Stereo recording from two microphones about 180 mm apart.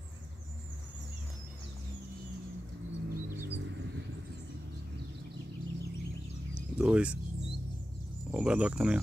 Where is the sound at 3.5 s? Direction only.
85° right.